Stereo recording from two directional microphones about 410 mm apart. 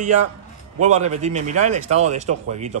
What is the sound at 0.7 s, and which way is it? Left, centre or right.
A man's voice, centre.